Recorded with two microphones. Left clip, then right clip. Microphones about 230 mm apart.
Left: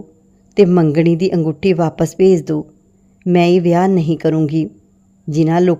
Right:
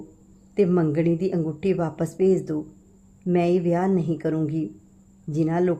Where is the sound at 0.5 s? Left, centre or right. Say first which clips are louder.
Left 9 dB; left.